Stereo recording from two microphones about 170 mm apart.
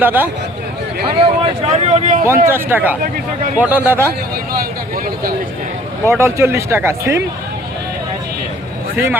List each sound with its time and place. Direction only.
0.0 s speech: 10° right (ahead or behind)
1.2 s speech: 35° right (ahead or behind)
2.2 s speech: 15° right (ahead or behind)
6.1 s speech: 15° right (ahead or behind)